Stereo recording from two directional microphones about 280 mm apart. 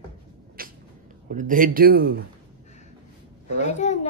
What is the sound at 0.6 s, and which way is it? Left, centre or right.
Cat, right.